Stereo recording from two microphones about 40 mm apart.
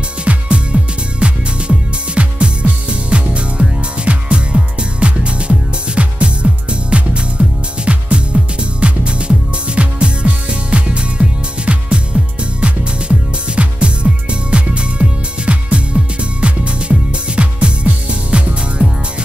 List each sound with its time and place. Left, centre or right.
0.2 s music: right